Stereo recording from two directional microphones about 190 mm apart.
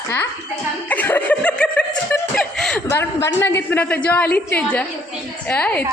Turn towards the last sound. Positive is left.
turn(degrees=5)  # may be behind; listen again after turning